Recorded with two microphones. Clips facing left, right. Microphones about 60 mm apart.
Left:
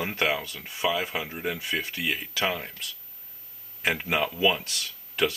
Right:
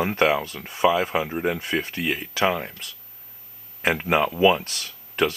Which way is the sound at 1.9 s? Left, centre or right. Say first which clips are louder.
Right 3 dB; centre.